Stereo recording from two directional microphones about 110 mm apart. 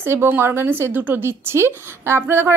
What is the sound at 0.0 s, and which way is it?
A woman's voice, 20° right (ahead or behind).